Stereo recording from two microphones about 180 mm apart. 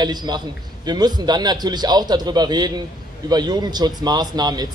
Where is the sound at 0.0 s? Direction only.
25° right (ahead or behind).